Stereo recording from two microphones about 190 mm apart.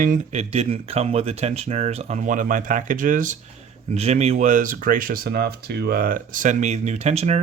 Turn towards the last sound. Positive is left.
turn(degrees=-35)  # may be behind; listen again after turning